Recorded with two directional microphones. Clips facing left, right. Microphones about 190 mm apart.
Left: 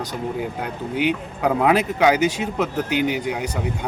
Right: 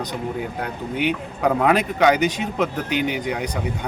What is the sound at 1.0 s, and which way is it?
A man's voice, 5° left (ahead or behind).